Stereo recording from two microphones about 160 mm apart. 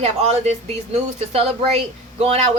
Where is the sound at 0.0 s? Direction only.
45° right (ahead or behind).